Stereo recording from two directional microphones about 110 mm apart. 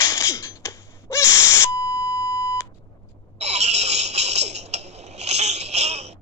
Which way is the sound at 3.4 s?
85° right.